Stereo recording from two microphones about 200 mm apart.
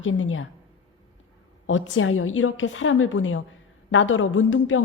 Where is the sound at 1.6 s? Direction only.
75° left (ahead or behind).